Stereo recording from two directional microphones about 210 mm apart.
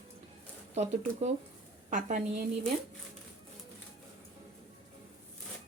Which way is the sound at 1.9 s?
35° right (ahead or behind).